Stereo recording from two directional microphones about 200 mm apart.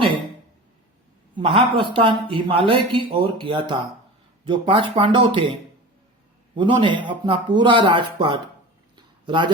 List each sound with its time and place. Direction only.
1.4 s speech: 25° right (ahead or behind)
6.6 s speech: 25° right (ahead or behind)
9.0 s a sound: 25° right (ahead or behind)